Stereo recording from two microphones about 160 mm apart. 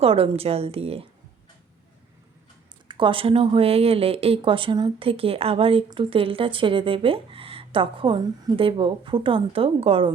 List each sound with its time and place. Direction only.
0.0 s speech: 35° right (ahead or behind)
2.8 s speech: 30° right (ahead or behind)